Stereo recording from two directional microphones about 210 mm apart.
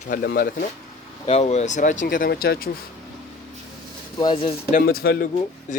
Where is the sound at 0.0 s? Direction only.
45° left (ahead or behind).